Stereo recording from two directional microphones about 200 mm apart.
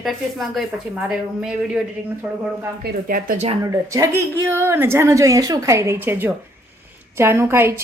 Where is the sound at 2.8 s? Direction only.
50° right (ahead or behind).